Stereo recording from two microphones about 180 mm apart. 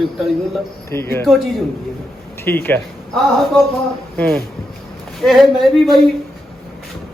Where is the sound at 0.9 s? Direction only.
15° left (ahead or behind).